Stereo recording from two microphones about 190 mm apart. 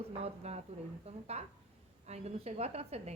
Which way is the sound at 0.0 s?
30° right (ahead or behind).